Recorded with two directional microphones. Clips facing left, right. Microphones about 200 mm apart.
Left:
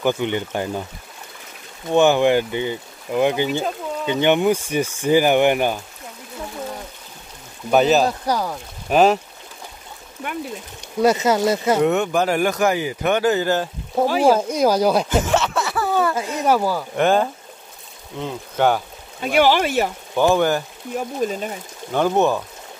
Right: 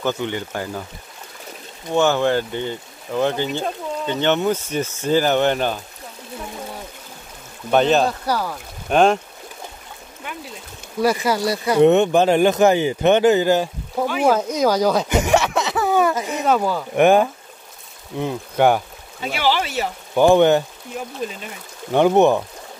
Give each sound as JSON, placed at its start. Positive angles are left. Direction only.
{"t": 0.0, "sound": "speech", "side_deg": 15}
{"t": 1.9, "sound": "speech", "side_deg": 15}
{"t": 7.7, "sound": "speech", "side_deg": 5}
{"t": 11.0, "sound": "speech", "side_deg": 20}
{"t": 11.8, "sound": "speech", "side_deg": -25}
{"t": 14.0, "sound": "speech", "side_deg": 35}
{"t": 14.3, "sound": "speech", "side_deg": 10}
{"t": 15.0, "sound": "a sound", "side_deg": -15}
{"t": 16.4, "sound": "speech", "side_deg": 5}
{"t": 16.9, "sound": "speech", "side_deg": -15}
{"t": 19.2, "sound": "speech", "side_deg": 50}
{"t": 20.2, "sound": "speech", "side_deg": -20}
{"t": 21.3, "sound": "speech", "side_deg": 40}
{"t": 21.9, "sound": "speech", "side_deg": -20}